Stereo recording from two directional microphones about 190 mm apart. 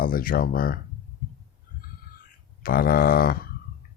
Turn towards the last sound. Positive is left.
turn(degrees=50)  # may be behind; listen again after turning